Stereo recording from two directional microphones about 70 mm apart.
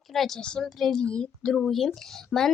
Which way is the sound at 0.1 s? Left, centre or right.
Centre.